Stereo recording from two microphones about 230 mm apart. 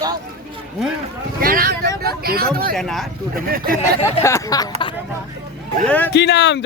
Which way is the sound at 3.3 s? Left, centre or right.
Right.